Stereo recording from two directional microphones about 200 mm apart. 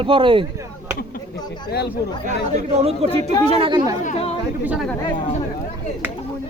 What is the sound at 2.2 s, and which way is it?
Speech, 35° right (ahead or behind).